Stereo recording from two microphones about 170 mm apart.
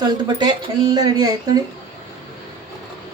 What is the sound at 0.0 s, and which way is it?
Speech, 25° right (ahead or behind).